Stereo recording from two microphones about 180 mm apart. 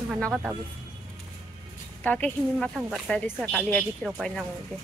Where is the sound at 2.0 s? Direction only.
5° left (ahead or behind).